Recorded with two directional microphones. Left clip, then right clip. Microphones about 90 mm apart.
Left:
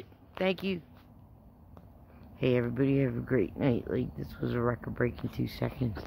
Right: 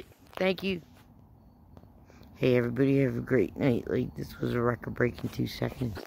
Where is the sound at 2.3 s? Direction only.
70° right (ahead or behind); by 5.7 s 45° right (ahead or behind).